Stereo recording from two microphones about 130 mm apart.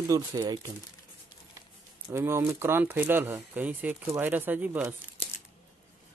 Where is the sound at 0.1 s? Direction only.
30° right (ahead or behind).